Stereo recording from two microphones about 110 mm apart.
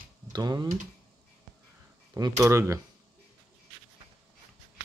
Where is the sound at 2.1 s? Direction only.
35° right (ahead or behind).